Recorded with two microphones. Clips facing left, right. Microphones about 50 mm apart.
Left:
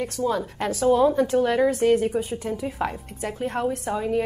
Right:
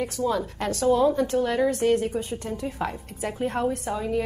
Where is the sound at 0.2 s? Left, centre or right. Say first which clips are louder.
Left 2 dB; centre.